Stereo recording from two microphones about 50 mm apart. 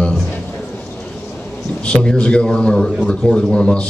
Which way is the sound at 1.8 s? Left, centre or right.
Centre.